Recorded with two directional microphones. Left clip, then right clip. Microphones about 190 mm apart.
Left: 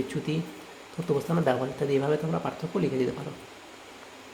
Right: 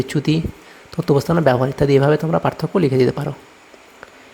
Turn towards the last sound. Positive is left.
turn(degrees=-50)  # may be behind; listen again after turning